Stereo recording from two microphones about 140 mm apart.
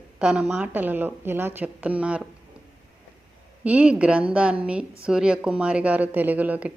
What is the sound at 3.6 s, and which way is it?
A woman's voice, 10° right (ahead or behind).